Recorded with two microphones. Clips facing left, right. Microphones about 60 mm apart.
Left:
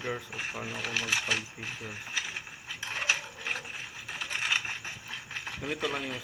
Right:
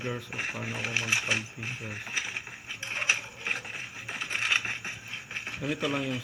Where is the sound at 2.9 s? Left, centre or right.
Right.